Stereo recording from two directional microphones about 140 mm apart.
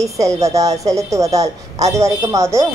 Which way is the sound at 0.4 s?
25° right (ahead or behind).